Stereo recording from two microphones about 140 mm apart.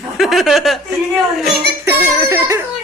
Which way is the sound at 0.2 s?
Centre (ahead or behind).